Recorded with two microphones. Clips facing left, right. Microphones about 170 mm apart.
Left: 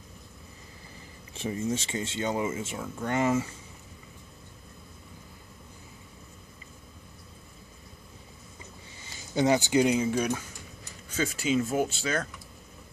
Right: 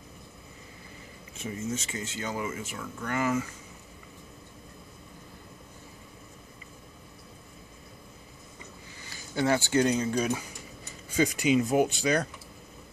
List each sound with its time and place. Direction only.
1.3 s speech: 30° left (ahead or behind)
9.0 s speech: 20° left (ahead or behind); by 10.3 s 5° left (ahead or behind)
11.1 s speech: 15° right (ahead or behind)